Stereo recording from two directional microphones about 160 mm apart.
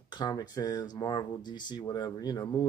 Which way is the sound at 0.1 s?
25° left (ahead or behind).